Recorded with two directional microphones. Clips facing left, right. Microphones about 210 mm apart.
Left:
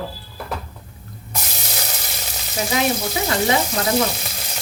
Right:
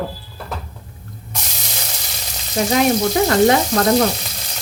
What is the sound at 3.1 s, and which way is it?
Speech, 50° right (ahead or behind).